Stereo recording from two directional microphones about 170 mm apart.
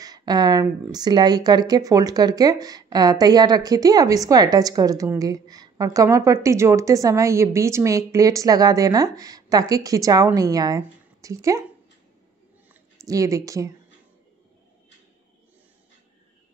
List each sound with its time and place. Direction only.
0.0 s speech: 25° right (ahead or behind)
13.0 s speech: 20° right (ahead or behind)